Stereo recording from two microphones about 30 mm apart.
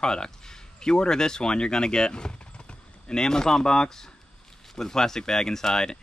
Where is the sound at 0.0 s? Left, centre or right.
Left.